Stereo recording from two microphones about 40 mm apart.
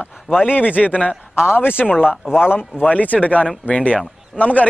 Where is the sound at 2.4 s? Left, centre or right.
Left.